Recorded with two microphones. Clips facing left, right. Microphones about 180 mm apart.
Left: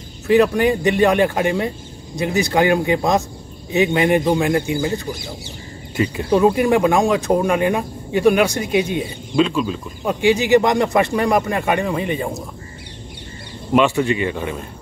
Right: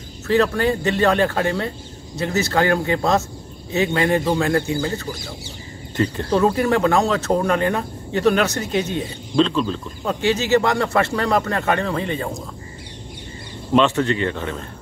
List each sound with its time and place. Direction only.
0.3 s speech: 15° left (ahead or behind)
13.7 s speech: 10° left (ahead or behind)